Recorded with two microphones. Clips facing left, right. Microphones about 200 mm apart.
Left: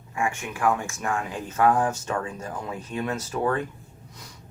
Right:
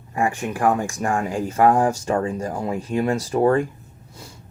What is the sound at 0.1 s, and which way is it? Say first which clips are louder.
Speech: right 6 dB; 35° right (ahead or behind).